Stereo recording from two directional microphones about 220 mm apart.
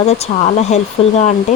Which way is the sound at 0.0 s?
30° left (ahead or behind).